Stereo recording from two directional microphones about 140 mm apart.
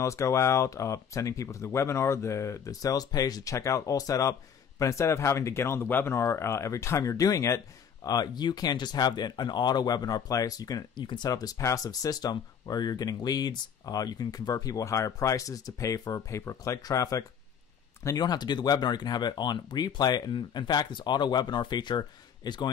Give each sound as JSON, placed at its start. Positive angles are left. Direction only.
{"t": 0.0, "sound": "speech", "side_deg": 20}